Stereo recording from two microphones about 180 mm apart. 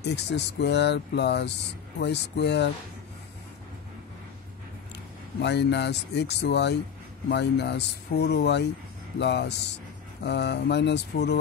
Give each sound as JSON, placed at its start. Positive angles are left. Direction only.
{"t": 0.0, "sound": "speech", "side_deg": 70}
{"t": 5.4, "sound": "speech", "side_deg": 70}